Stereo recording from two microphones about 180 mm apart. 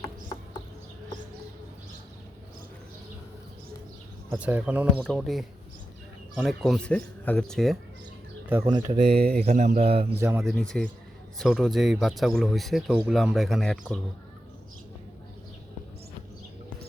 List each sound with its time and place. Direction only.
4.4 s speech: 5° right (ahead or behind)
4.9 s speech: 5° left (ahead or behind)
8.6 s mantra: 30° right (ahead or behind)
9.0 s speech: 60° right (ahead or behind)
9.4 s mantra: 40° right (ahead or behind)
10.2 s speech: 10° right (ahead or behind)
10.4 s speech: 5° left (ahead or behind)